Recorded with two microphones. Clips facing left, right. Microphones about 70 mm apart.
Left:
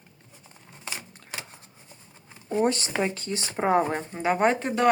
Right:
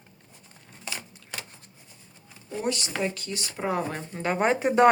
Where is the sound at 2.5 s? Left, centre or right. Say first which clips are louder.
Left 5 dB; left.